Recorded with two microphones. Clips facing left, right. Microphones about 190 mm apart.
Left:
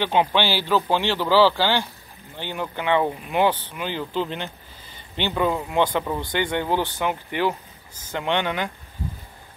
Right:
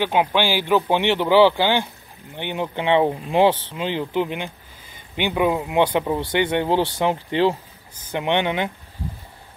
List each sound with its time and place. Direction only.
0.0 s speech: 10° right (ahead or behind)